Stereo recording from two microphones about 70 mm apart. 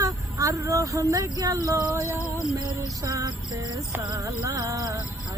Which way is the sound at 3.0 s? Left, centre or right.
Right.